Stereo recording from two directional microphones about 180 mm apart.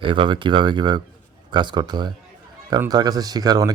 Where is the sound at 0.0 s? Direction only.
25° right (ahead or behind).